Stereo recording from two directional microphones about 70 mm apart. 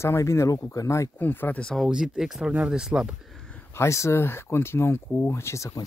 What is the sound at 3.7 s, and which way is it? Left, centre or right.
Speech, left.